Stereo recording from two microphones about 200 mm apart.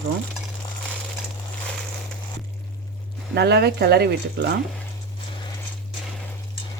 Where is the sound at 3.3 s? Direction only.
55° right (ahead or behind).